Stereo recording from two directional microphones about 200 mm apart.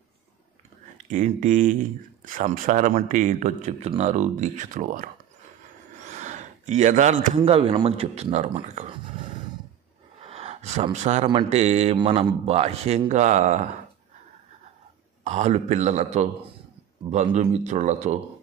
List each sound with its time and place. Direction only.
1.0 s speech: 40° right (ahead or behind)
6.0 s gasp: 35° right (ahead or behind)
7.3 s speech: 30° right (ahead or behind)
9.2 s roar: 25° right (ahead or behind)
10.2 s gasp: 30° right (ahead or behind)
11.2 s speech: 30° right (ahead or behind)
15.2 s speech: 35° right (ahead or behind)